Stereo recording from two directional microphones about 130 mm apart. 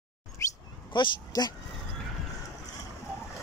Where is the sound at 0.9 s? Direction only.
35° left (ahead or behind).